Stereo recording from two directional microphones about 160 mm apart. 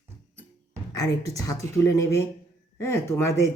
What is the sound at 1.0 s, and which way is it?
Speech, 20° left (ahead or behind).